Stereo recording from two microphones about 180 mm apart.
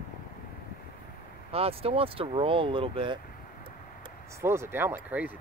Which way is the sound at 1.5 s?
35° right (ahead or behind).